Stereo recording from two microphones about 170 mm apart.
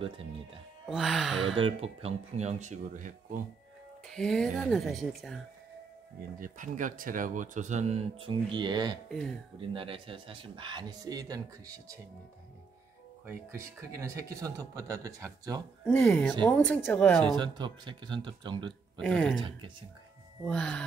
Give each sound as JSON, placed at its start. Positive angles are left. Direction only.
{"t": 0.8, "sound": "speech", "side_deg": 0}
{"t": 1.4, "sound": "speech", "side_deg": -30}
{"t": 4.1, "sound": "speech", "side_deg": 5}
{"t": 6.4, "sound": "speech", "side_deg": -50}
{"t": 9.1, "sound": "speech", "side_deg": 5}
{"t": 9.6, "sound": "speech", "side_deg": -30}
{"t": 13.3, "sound": "speech", "side_deg": -15}
{"t": 15.8, "sound": "speech", "side_deg": 5}
{"t": 17.4, "sound": "speech", "side_deg": -25}
{"t": 18.9, "sound": "speech", "side_deg": 5}
{"t": 20.4, "sound": "speech", "side_deg": 5}